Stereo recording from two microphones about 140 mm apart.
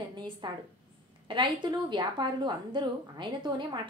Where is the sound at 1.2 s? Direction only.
35° right (ahead or behind).